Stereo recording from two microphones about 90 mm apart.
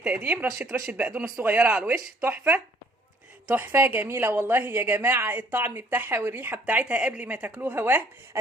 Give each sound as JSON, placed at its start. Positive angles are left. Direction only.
{"t": 0.4, "sound": "a woman's voice", "side_deg": -25}
{"t": 1.1, "sound": "speech", "side_deg": -5}
{"t": 1.5, "sound": "a woman's voice", "side_deg": -20}